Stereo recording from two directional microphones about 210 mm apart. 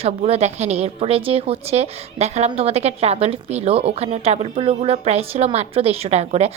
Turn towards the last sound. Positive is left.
turn(degrees=-30)  # may be behind; listen again after turning